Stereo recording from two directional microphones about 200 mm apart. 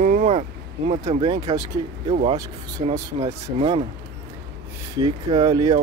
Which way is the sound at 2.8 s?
30° right (ahead or behind).